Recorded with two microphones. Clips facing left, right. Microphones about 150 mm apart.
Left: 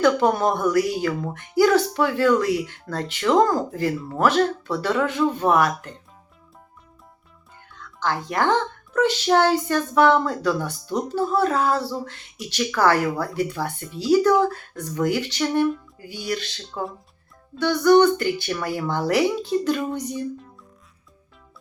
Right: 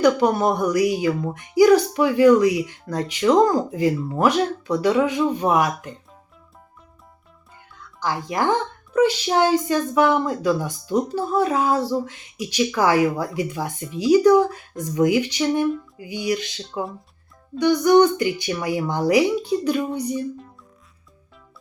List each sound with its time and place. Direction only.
0.3 s speech: 10° right (ahead or behind)
7.9 s speech: 10° right (ahead or behind)